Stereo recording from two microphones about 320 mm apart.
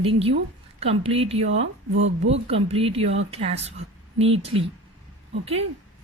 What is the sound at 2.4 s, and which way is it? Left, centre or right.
Speech, centre.